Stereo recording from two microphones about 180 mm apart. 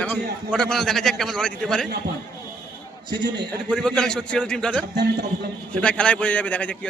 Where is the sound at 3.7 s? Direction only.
5° left (ahead or behind).